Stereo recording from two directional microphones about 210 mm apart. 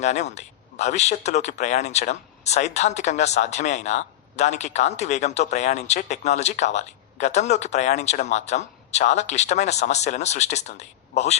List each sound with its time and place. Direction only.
0.0 s speech: 35° left (ahead or behind)